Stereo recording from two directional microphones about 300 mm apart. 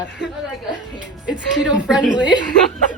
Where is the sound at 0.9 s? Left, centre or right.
Centre.